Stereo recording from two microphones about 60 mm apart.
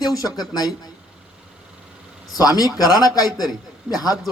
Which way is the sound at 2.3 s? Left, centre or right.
Left.